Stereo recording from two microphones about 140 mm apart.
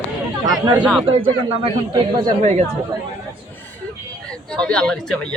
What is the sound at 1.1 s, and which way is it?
A man's voice, 40° right (ahead or behind).